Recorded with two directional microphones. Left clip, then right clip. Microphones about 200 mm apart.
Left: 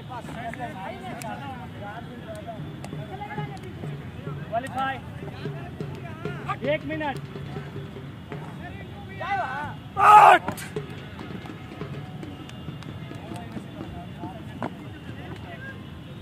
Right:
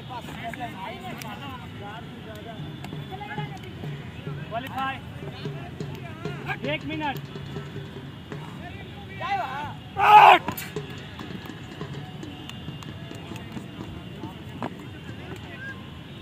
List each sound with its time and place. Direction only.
4.6 s vehicle: 20° left (ahead or behind)
6.4 s speech: 20° left (ahead or behind)
9.2 s vehicle: 10° right (ahead or behind)
9.9 s speech: 5° left (ahead or behind)